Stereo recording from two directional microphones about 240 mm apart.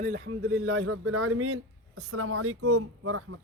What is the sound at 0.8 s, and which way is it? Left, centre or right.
Speech, right.